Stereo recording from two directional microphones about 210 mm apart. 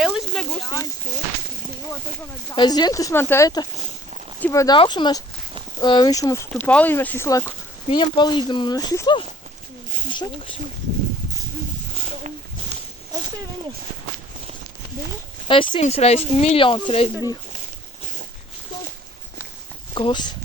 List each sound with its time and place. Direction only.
0.0 s a sound: centre (ahead or behind)
0.6 s speech: 20° left (ahead or behind)
2.6 s speech: 20° left (ahead or behind)
15.4 s speech: 25° left (ahead or behind)
19.9 s speech: 25° left (ahead or behind)